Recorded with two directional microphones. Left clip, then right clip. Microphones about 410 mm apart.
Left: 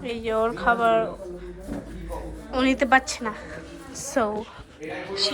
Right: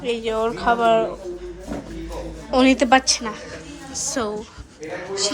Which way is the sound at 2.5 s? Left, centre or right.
Centre.